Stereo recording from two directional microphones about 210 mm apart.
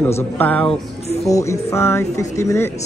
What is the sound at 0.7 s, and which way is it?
Speech, 30° left (ahead or behind).